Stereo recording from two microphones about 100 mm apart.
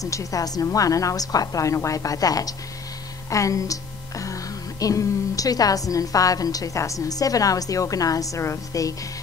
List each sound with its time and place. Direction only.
0.0 s a woman's voice: 35° left (ahead or behind)